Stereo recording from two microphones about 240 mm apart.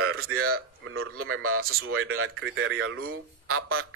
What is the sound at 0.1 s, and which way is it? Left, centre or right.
A man's voice, right.